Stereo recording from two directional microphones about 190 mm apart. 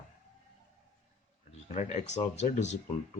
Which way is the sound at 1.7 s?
35° left (ahead or behind).